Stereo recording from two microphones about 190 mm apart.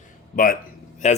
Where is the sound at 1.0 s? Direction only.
40° left (ahead or behind).